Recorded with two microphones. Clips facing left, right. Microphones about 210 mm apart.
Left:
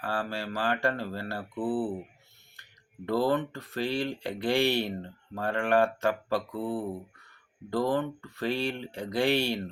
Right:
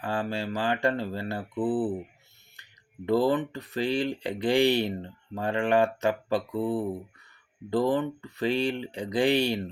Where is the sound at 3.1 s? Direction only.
20° right (ahead or behind).